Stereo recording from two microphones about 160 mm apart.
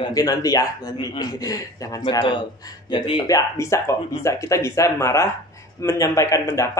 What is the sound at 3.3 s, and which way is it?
Speech, 20° left (ahead or behind).